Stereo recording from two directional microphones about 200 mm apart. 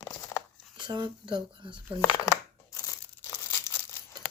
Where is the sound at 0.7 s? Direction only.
25° right (ahead or behind).